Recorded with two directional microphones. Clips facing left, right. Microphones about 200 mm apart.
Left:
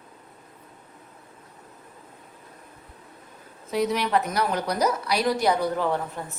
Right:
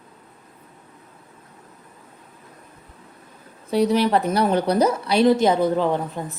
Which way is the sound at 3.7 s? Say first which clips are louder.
Right 5 dB; 30° right (ahead or behind).